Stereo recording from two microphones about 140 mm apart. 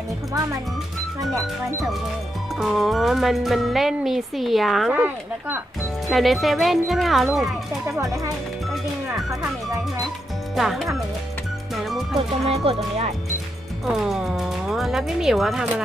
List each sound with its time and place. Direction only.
2.6 s speech: centre (ahead or behind)
4.9 s speech: 15° right (ahead or behind)
6.0 s speech: centre (ahead or behind)
10.5 s speech: centre (ahead or behind)
11.7 s music: centre (ahead or behind)
12.4 s speech: 45° right (ahead or behind)
13.8 s speech: centre (ahead or behind)